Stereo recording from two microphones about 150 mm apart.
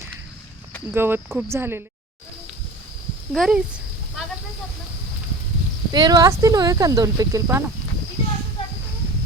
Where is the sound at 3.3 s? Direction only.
5° right (ahead or behind).